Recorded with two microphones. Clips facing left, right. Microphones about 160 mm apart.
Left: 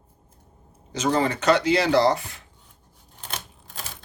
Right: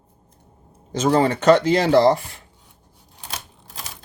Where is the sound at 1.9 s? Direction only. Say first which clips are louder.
Right 6 dB; 45° right (ahead or behind).